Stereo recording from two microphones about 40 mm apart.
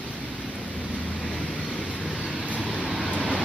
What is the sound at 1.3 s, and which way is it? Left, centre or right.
Vehicle, centre.